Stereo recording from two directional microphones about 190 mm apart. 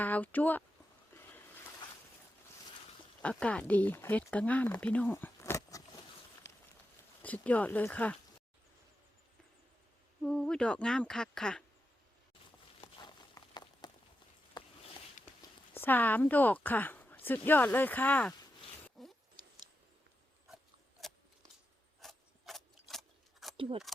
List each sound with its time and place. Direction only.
0.0 s speech: 10° left (ahead or behind)
3.2 s speech: 5° left (ahead or behind)
6.4 s run: 65° left (ahead or behind)
7.2 s speech: 10° left (ahead or behind)
10.2 s speech: 5° left (ahead or behind)
12.8 s a sound: 25° left (ahead or behind)
15.4 s speech: 10° left (ahead or behind)
18.9 s zipper: centre (ahead or behind)
22.0 s a sound: centre (ahead or behind)
23.6 s speech: 25° right (ahead or behind)